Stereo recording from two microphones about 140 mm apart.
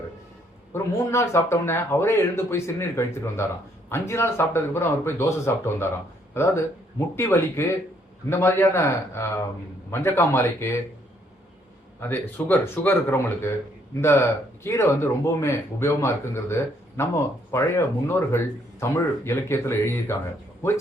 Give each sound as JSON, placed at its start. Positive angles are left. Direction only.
{"t": 0.7, "sound": "speech", "side_deg": 20}
{"t": 11.9, "sound": "speech", "side_deg": 15}